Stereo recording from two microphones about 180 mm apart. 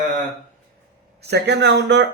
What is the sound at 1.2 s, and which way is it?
Speech, 70° right (ahead or behind).